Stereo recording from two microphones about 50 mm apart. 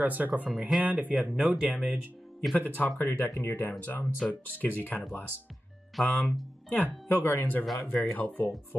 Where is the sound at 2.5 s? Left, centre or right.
Left.